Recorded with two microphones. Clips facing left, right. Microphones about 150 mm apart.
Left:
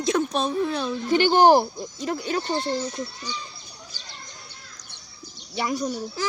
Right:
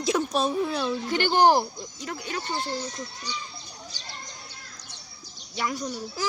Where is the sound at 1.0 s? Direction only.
20° left (ahead or behind).